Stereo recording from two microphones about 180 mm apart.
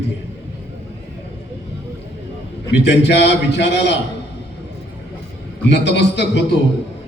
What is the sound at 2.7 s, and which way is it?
A man's voice, 75° left (ahead or behind).